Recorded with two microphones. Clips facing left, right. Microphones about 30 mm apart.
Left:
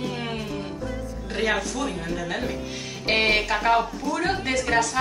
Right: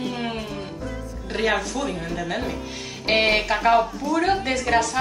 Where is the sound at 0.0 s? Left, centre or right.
Centre.